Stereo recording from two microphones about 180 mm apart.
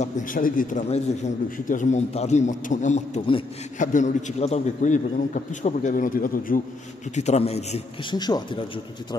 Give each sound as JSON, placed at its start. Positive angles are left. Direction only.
{"t": 0.0, "sound": "a man's voice", "side_deg": 50}
{"t": 7.2, "sound": "a man's voice", "side_deg": 35}
{"t": 8.2, "sound": "speech", "side_deg": 20}